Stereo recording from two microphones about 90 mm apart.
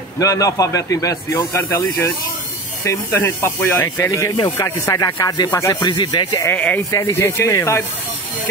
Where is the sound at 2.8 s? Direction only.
35° left (ahead or behind).